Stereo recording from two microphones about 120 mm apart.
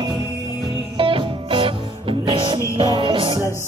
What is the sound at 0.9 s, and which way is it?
Music, 45° right (ahead or behind).